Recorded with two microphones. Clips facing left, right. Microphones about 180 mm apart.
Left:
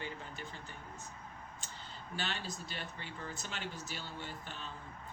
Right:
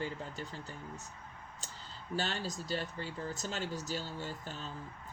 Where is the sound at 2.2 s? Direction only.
40° right (ahead or behind).